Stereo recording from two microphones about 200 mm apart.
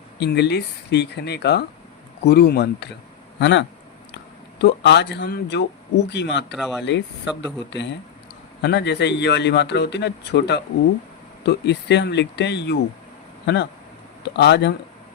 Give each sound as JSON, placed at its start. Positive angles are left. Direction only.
{"t": 0.2, "sound": "a man's voice", "side_deg": 55}
{"t": 6.6, "sound": "speech", "side_deg": 0}
{"t": 6.8, "sound": "a man's voice", "side_deg": 60}